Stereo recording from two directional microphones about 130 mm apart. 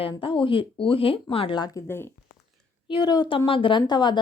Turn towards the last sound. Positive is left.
turn(degrees=35)  # may be behind; listen again after turning